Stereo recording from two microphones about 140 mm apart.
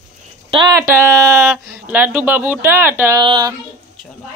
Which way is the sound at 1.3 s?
10° right (ahead or behind).